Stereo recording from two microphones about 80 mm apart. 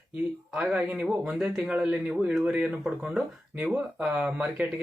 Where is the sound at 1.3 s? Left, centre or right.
Centre.